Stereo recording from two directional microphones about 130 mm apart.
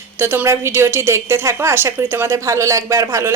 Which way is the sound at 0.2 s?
20° right (ahead or behind).